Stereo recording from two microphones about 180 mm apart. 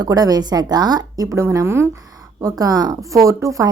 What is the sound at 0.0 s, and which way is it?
Speech, 20° right (ahead or behind).